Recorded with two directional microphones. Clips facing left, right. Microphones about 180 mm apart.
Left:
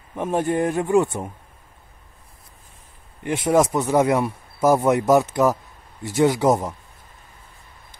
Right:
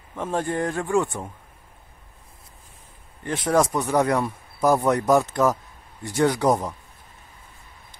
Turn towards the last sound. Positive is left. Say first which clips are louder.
# left 2 dB
turn(degrees=20)  # may be behind; listen again after turning